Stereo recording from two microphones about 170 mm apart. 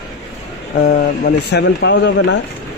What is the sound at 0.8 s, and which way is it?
Speech, 65° left (ahead or behind).